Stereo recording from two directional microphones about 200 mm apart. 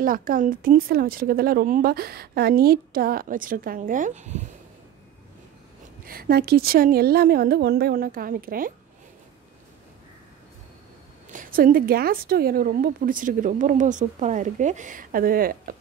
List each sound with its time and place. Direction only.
0.0 s a woman's voice: 45° right (ahead or behind)
6.0 s a woman's voice: 50° right (ahead or behind)
11.3 s a woman's voice: 45° right (ahead or behind)